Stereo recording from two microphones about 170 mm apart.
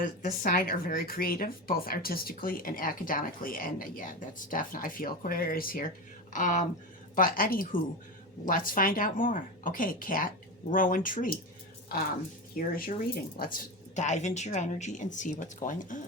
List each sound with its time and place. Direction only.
0.0 s speech: 50° left (ahead or behind)
6.3 s speech: 50° left (ahead or behind)
12.5 s speech: 60° left (ahead or behind)
13.9 s speech: 45° left (ahead or behind)